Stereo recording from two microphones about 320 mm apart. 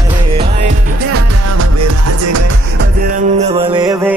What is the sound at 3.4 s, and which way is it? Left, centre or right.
Music, centre.